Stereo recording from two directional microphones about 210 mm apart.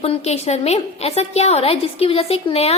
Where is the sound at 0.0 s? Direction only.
30° left (ahead or behind).